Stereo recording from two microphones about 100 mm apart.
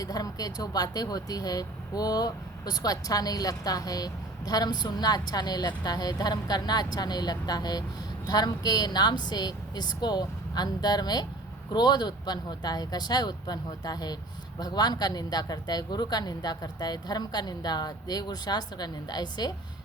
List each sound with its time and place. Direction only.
0.0 s speech: 40° left (ahead or behind)